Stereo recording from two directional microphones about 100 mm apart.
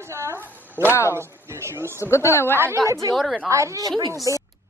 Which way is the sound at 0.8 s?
25° right (ahead or behind).